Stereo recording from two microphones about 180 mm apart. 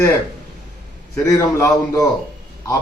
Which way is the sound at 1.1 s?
15° left (ahead or behind).